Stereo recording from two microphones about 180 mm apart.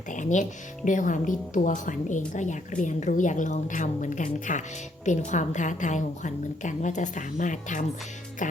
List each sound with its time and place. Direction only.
0.1 s a woman's voice: 45° left (ahead or behind)